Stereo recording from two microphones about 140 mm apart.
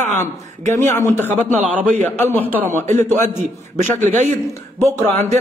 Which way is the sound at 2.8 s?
60° right (ahead or behind).